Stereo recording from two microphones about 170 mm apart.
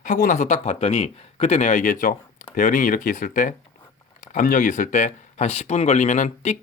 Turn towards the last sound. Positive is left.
turn(degrees=40)  # may be behind; listen again after turning